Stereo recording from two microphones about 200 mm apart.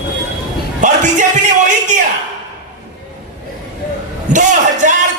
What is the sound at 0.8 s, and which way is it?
Speech, 40° right (ahead or behind).